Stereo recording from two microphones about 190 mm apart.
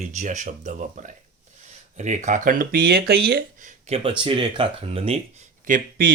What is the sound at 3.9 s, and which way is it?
Speech, 30° right (ahead or behind).